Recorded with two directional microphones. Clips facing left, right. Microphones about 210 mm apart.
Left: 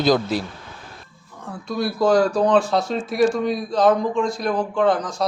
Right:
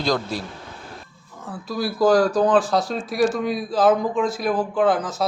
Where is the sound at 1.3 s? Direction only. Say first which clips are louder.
Left 1 dB; 5° right (ahead or behind).